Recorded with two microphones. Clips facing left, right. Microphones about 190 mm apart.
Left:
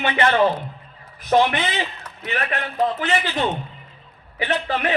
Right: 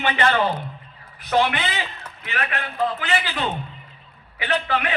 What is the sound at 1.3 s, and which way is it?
A man's voice, 35° left (ahead or behind).